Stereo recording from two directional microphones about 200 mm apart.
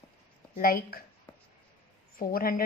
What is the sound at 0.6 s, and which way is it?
Speech, 45° left (ahead or behind).